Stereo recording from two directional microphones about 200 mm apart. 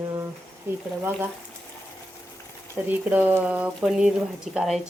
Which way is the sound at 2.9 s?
10° right (ahead or behind).